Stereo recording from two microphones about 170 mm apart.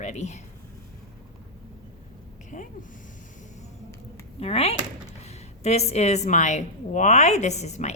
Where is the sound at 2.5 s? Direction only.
45° left (ahead or behind).